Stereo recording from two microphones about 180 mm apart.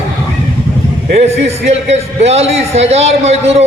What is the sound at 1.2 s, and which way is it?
A man's voice, 35° right (ahead or behind).